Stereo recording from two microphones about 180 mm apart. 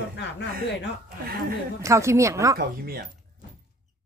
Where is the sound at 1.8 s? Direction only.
15° right (ahead or behind).